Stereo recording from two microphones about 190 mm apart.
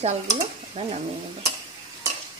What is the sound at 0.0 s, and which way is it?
Speech, 35° right (ahead or behind).